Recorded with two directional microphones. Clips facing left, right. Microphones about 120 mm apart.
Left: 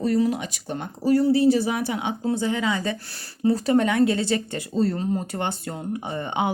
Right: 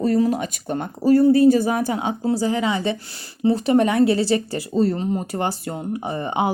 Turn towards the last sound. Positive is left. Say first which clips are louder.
# right 3 dB
turn(degrees=-30)  # may be behind; listen again after turning